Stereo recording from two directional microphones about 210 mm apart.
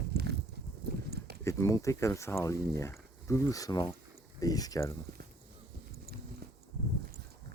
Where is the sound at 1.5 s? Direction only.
15° left (ahead or behind).